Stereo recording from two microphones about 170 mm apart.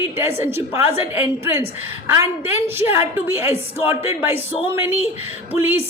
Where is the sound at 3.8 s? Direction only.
35° left (ahead or behind).